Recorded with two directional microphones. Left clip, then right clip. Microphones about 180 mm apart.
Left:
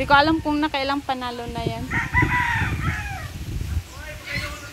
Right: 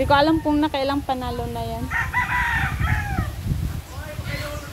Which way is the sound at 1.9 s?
45° left (ahead or behind).